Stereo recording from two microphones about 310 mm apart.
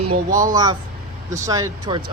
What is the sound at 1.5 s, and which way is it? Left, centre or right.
Speech, centre.